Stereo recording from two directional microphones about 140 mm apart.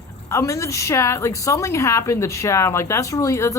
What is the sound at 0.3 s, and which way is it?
A woman's voice, 20° left (ahead or behind).